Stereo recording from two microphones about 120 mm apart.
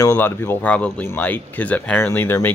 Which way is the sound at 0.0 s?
20° left (ahead or behind).